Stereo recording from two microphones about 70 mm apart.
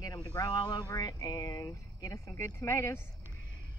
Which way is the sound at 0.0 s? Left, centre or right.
Left.